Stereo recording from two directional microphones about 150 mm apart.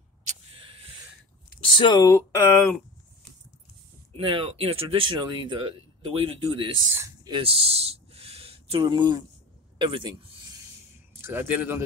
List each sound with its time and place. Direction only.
1.6 s speech: 30° left (ahead or behind)
2.0 s speech: 15° left (ahead or behind)
4.2 s speech: 40° right (ahead or behind)
6.9 s speech: 20° right (ahead or behind)
7.2 s speech: 35° right (ahead or behind)
11.1 s speech: 15° right (ahead or behind)